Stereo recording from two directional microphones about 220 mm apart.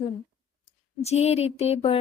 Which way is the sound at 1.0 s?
30° left (ahead or behind).